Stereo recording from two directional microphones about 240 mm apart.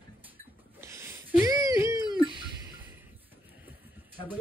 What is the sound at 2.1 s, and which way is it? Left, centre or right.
Music, centre.